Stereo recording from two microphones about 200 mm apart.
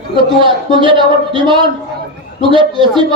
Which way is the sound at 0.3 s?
25° right (ahead or behind).